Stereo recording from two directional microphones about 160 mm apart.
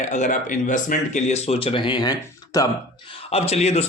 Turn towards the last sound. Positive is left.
turn(degrees=40)  # may be behind; listen again after turning